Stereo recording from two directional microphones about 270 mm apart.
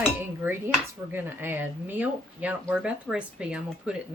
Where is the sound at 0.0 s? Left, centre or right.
Centre.